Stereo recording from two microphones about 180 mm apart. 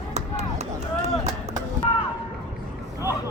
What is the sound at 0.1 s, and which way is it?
Chop, 35° right (ahead or behind).